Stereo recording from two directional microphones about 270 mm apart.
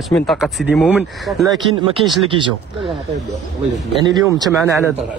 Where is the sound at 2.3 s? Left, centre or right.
Centre.